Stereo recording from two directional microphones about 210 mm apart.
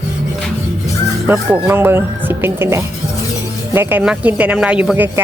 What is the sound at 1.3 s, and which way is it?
Speech, 10° right (ahead or behind).